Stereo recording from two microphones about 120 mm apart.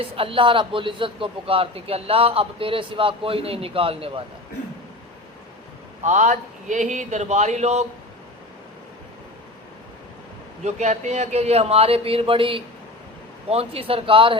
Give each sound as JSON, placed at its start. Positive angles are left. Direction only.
{"t": 0.0, "sound": "a man's voice", "side_deg": -50}
{"t": 6.0, "sound": "a man's voice", "side_deg": -80}
{"t": 10.6, "sound": "a man's voice", "side_deg": -70}